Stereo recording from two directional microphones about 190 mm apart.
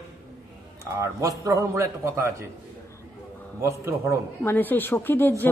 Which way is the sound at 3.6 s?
15° right (ahead or behind).